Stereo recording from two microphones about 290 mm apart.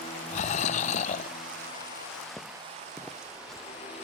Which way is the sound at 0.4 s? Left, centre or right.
Left.